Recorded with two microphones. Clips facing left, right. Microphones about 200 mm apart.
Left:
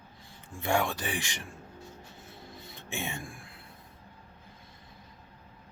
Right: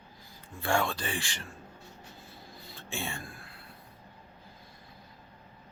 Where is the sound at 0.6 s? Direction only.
15° left (ahead or behind).